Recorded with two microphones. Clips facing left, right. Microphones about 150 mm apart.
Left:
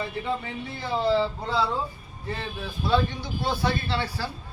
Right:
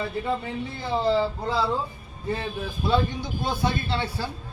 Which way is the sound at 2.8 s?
20° right (ahead or behind).